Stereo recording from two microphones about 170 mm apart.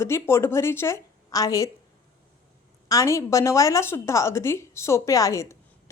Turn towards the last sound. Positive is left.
turn(degrees=15)  # may be behind; listen again after turning